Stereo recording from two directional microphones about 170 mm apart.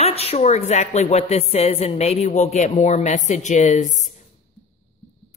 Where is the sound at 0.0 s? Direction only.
35° left (ahead or behind).